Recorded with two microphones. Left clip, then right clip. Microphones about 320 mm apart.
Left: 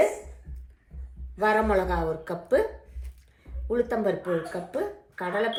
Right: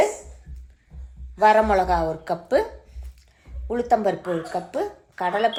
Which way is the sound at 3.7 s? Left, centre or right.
Centre.